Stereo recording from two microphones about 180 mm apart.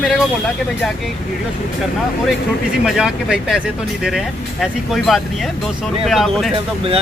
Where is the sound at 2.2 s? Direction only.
5° right (ahead or behind).